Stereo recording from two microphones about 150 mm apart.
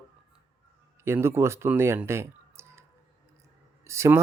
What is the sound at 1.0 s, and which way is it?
Speech, 15° right (ahead or behind).